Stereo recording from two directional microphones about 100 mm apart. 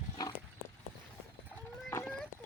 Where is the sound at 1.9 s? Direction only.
20° left (ahead or behind).